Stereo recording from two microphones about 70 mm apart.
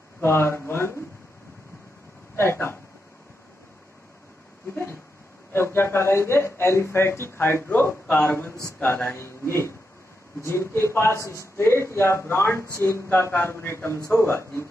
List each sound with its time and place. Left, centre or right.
0.2 s a man's voice: left
2.3 s speech: left
5.5 s a man's voice: left